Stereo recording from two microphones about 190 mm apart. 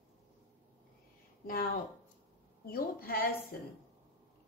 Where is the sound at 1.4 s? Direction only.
50° left (ahead or behind).